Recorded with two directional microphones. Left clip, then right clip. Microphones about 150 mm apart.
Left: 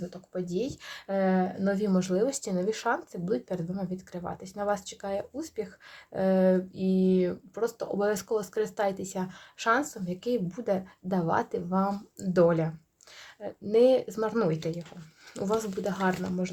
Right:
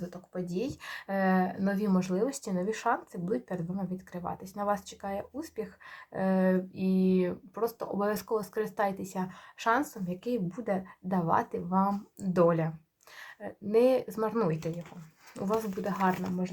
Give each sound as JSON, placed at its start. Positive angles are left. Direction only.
{"t": 0.1, "sound": "speech", "side_deg": 40}
{"t": 2.0, "sound": "speech", "side_deg": 45}